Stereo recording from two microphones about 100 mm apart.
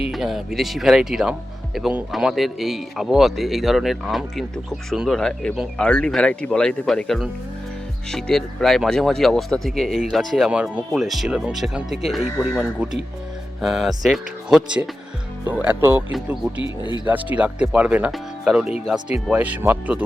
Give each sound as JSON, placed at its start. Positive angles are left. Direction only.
{"t": 0.1, "sound": "speech", "side_deg": -5}
{"t": 10.5, "sound": "speech", "side_deg": -10}
{"t": 11.0, "sound": "speech", "side_deg": 0}
{"t": 15.4, "sound": "speech", "side_deg": -20}
{"t": 16.1, "sound": "speech", "side_deg": -5}